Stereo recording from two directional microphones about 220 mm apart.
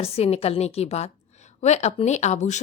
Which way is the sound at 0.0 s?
25° left (ahead or behind).